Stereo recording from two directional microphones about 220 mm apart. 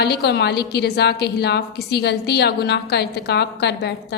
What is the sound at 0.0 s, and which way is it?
A woman's voice, 50° left (ahead or behind).